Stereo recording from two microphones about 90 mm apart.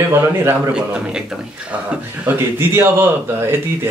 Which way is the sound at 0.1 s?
25° right (ahead or behind).